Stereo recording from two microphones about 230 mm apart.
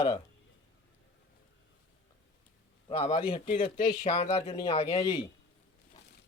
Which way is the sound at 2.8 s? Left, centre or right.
Left.